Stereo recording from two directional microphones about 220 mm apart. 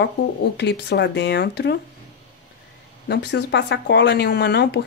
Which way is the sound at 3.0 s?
50° left (ahead or behind).